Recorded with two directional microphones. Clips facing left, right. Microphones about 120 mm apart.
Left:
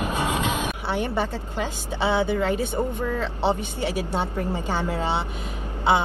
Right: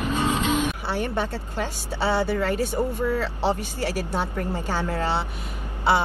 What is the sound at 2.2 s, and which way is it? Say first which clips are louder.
Speech: left 1 dB; 20° left (ahead or behind).